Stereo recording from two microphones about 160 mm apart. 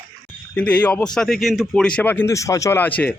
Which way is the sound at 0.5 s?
10° left (ahead or behind).